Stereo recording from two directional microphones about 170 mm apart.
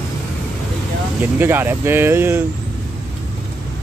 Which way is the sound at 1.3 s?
10° right (ahead or behind).